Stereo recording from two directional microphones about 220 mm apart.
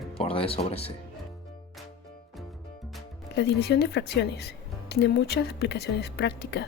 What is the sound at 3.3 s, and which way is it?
Speech, 50° left (ahead or behind).